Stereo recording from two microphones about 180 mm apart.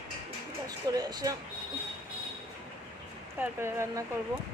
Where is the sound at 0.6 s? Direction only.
20° right (ahead or behind).